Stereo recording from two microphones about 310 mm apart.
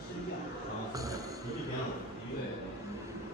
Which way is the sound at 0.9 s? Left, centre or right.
Centre.